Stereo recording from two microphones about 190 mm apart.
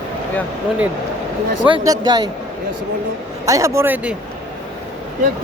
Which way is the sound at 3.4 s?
15° right (ahead or behind).